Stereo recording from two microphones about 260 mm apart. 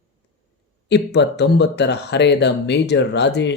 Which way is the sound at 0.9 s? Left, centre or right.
Left.